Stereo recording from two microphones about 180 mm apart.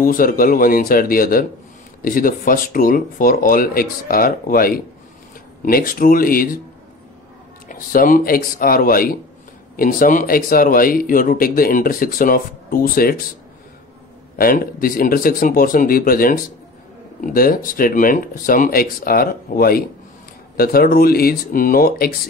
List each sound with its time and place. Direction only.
0.0 s speech: 50° left (ahead or behind)
7.6 s speech: 50° left (ahead or behind)
14.4 s speech: 55° left (ahead or behind)